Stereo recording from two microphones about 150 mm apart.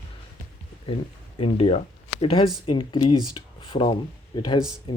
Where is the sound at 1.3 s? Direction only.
35° left (ahead or behind).